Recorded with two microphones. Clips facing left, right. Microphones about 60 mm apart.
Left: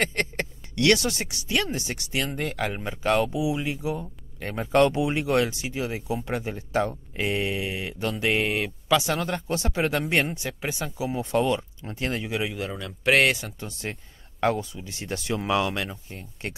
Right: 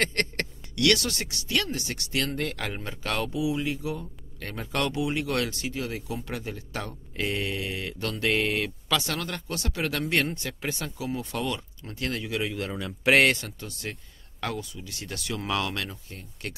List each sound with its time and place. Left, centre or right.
0.0 s a sound: centre
0.7 s speech: left
12.5 s a man's voice: centre
13.6 s speech: left